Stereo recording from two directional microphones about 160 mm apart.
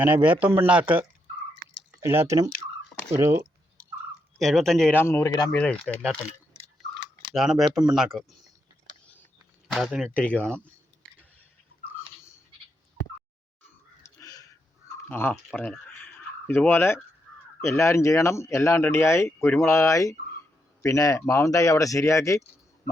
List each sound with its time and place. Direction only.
0.0 s speech: 10° right (ahead or behind)
4.4 s speech: centre (ahead or behind)
4.9 s speech: 15° left (ahead or behind)
5.5 s speech: 10° left (ahead or behind)
9.7 s speech: centre (ahead or behind)
14.2 s crow: 20° left (ahead or behind)
15.1 s speech: 10° left (ahead or behind)
15.5 s a sound: 10° left (ahead or behind)
17.6 s speech: 15° left (ahead or behind)